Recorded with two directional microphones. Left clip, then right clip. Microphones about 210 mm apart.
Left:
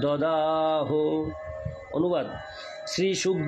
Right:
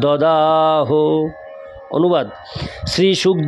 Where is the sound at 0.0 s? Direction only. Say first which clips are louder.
Right 11 dB; 50° right (ahead or behind).